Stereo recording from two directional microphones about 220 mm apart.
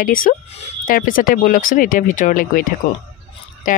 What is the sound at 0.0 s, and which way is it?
Speech, 40° left (ahead or behind).